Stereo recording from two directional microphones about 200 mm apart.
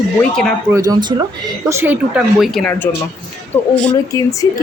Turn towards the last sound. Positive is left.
turn(degrees=15)  # may be behind; listen again after turning